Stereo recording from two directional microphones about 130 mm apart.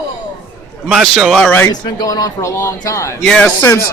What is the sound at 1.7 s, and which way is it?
A man's voice, 30° left (ahead or behind).